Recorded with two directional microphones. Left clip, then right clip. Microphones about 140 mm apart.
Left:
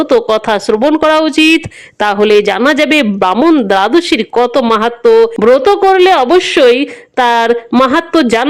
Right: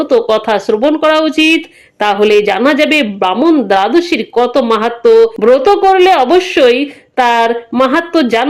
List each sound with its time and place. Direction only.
0.0 s speech: 35° left (ahead or behind)